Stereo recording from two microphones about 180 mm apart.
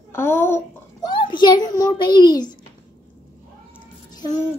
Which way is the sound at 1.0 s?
25° left (ahead or behind).